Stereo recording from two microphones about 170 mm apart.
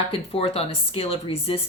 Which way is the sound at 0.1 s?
35° left (ahead or behind).